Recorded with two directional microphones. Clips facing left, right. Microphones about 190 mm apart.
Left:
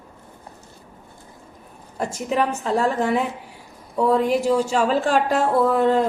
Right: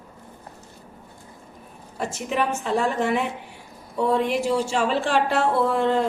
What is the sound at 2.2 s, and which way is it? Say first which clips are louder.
A woman's voice: left 3 dB; 40° left (ahead or behind).